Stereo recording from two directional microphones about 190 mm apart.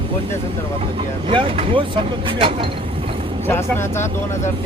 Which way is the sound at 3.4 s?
10° left (ahead or behind).